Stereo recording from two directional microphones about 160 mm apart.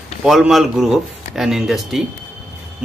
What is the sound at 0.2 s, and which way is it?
Speech, centre (ahead or behind).